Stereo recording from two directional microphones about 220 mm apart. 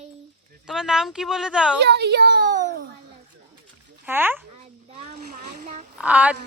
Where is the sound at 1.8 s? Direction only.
50° right (ahead or behind).